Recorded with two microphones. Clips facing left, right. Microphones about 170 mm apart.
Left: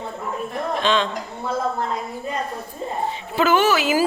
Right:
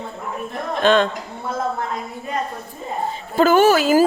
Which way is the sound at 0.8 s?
50° right (ahead or behind).